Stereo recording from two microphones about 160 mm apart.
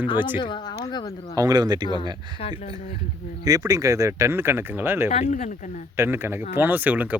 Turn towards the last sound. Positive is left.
turn(degrees=-10)  # may be behind; listen again after turning